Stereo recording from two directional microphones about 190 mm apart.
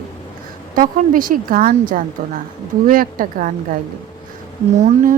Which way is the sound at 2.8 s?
50° right (ahead or behind).